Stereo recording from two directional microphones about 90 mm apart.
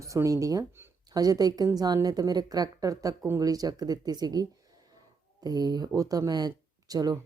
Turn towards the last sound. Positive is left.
turn(degrees=-45)  # may be behind; listen again after turning